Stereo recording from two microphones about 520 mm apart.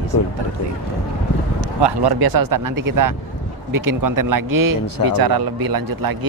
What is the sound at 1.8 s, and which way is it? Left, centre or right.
Speech, right.